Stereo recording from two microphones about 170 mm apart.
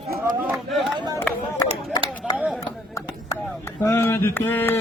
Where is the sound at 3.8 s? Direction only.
15° left (ahead or behind).